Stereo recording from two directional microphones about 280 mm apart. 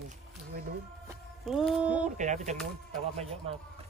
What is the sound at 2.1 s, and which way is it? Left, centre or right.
Speech, right.